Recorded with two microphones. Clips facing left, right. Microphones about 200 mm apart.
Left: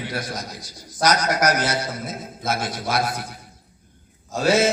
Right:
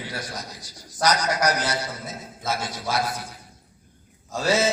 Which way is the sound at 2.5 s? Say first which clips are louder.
Left 3 dB; 55° left (ahead or behind).